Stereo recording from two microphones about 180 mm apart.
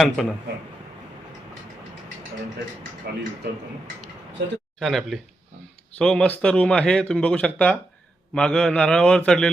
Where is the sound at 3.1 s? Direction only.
65° right (ahead or behind).